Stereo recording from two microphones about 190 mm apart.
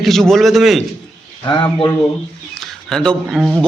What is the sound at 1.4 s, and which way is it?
Speech, 25° left (ahead or behind).